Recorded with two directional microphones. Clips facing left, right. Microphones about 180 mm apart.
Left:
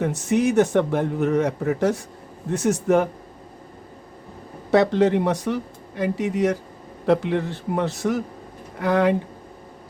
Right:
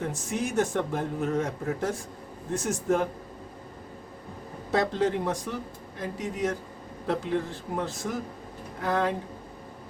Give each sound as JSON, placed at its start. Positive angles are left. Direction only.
{"t": 0.0, "sound": "a man's voice", "side_deg": 70}
{"t": 4.7, "sound": "a man's voice", "side_deg": 70}